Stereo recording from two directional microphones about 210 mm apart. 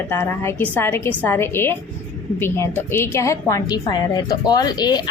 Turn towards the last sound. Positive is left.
turn(degrees=20)  # may be behind; listen again after turning